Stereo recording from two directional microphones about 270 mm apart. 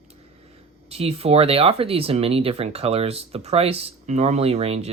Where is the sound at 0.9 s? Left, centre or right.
Right.